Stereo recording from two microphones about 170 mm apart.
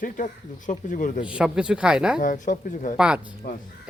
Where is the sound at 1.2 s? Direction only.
5° right (ahead or behind).